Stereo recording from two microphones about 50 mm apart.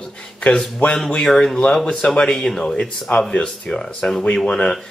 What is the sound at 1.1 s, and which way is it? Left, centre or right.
Speech, centre.